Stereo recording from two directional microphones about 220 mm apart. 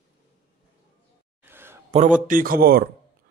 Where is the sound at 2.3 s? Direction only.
40° right (ahead or behind).